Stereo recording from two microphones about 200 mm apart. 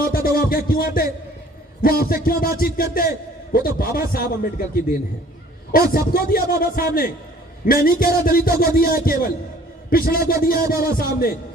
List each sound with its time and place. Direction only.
0.0 s music: 50° left (ahead or behind)
1.8 s a man's voice: 45° left (ahead or behind)